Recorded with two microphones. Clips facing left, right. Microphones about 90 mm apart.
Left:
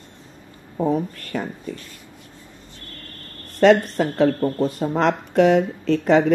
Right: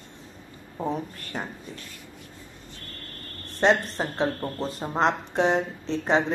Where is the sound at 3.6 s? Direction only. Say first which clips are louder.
Left 7 dB; 80° left.